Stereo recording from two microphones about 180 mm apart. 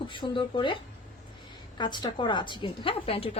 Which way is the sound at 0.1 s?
25° left (ahead or behind).